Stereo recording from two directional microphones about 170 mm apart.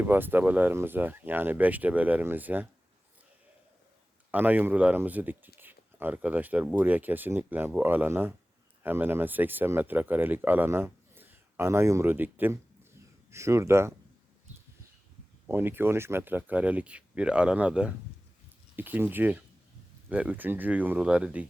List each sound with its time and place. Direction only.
0.0 s speech: 10° right (ahead or behind)
4.3 s speech: 10° right (ahead or behind)
15.4 s speech: 10° right (ahead or behind)